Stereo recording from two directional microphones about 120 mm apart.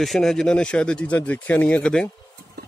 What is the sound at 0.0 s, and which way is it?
Speech, centre (ahead or behind).